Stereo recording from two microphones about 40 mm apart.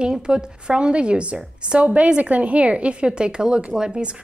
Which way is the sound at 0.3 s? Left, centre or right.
Right.